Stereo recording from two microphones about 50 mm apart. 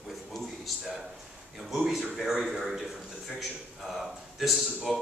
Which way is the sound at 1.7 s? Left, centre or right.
Centre.